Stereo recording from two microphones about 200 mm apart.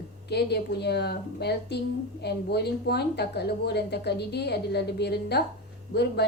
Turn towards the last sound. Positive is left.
turn(degrees=55)  # may be behind; listen again after turning